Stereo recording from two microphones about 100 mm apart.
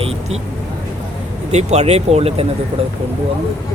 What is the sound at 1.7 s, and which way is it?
Speech, 90° right.